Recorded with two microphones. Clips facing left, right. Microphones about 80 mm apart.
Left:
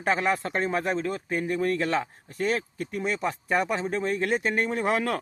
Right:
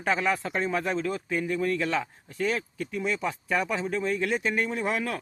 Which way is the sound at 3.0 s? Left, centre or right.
Left.